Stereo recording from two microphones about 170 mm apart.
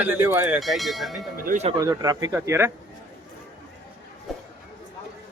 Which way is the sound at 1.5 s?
45° right (ahead or behind).